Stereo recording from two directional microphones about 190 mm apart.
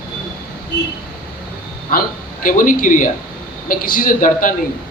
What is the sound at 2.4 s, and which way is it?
A man's voice, 45° left (ahead or behind).